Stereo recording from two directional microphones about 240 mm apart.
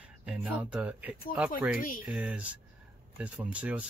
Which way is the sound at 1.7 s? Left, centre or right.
Left.